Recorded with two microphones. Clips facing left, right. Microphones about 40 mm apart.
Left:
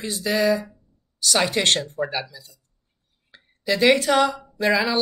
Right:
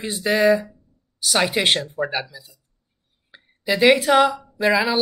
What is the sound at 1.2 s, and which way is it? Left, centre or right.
A woman's voice, centre.